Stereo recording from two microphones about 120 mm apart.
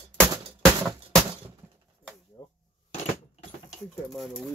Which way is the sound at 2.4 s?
35° left (ahead or behind).